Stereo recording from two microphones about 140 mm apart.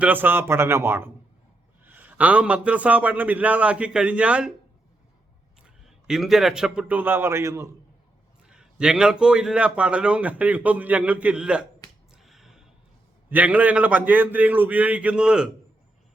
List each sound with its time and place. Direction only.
0.0 s a man's voice: 15° right (ahead or behind)
5.6 s a man's voice: 5° right (ahead or behind); by 7.8 s 20° right (ahead or behind)
8.4 s a man's voice: 5° right (ahead or behind)
12.1 s finger snapping: centre (ahead or behind)
13.3 s a man's voice: 10° right (ahead or behind)